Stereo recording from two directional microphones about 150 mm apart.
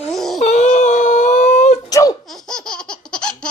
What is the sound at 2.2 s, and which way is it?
Laughter, centre (ahead or behind).